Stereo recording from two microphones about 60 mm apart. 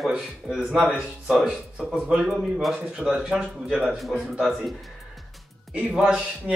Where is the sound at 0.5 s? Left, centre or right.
Centre.